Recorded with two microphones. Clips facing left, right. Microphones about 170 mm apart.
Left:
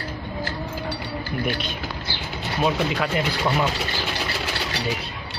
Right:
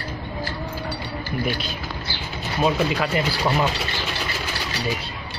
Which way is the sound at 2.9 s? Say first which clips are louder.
Right 1 dB; centre (ahead or behind).